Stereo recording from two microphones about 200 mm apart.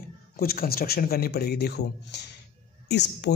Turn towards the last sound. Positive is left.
turn(degrees=60)  # may be behind; listen again after turning